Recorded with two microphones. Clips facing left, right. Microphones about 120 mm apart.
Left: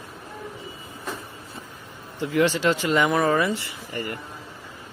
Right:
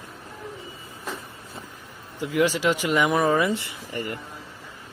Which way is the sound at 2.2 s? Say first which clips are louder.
Left 1 dB; 10° right (ahead or behind).